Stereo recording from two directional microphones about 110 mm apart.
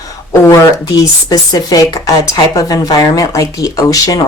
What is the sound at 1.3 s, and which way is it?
Speech, 35° left (ahead or behind).